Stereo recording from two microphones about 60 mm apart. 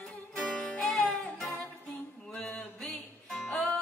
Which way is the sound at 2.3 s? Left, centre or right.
Centre.